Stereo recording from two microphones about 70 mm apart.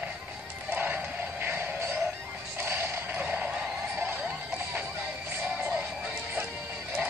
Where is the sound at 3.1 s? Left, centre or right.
Right.